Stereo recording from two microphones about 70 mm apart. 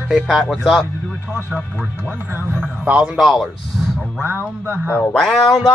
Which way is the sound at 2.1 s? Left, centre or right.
Right.